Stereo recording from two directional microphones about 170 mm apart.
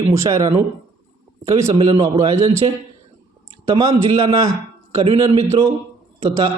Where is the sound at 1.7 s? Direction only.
30° right (ahead or behind).